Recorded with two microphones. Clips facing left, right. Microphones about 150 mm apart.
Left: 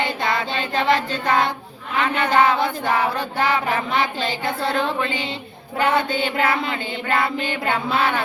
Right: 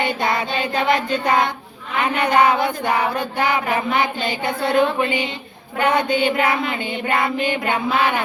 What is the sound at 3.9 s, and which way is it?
Child singing, 30° left (ahead or behind).